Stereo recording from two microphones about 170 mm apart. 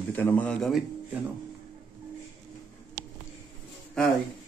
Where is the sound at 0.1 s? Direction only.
10° left (ahead or behind).